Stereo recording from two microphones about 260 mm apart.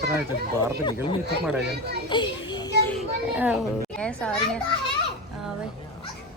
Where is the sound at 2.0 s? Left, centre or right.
Centre.